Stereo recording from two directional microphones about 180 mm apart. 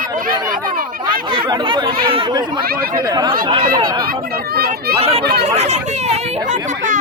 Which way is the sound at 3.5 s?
25° right (ahead or behind).